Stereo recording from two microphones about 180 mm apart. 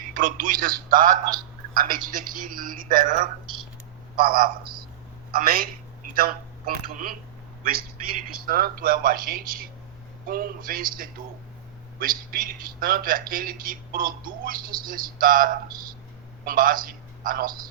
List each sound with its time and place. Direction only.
0.1 s a man's voice: 50° right (ahead or behind)
8.4 s a man's voice: 55° right (ahead or behind)